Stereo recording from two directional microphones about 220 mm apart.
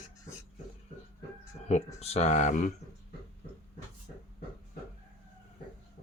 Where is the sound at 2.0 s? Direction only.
30° left (ahead or behind).